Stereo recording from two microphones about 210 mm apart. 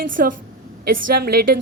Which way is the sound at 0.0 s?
40° right (ahead or behind).